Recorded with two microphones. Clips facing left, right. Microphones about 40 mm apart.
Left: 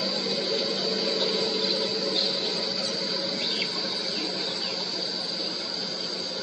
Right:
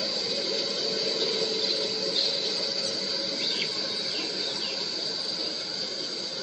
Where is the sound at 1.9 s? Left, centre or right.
Centre.